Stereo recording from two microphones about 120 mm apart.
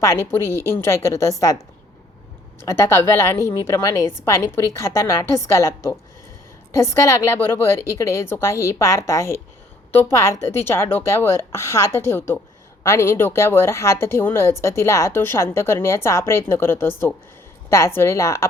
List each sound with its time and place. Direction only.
0.0 s speech: 20° left (ahead or behind)
2.6 s speech: 25° left (ahead or behind)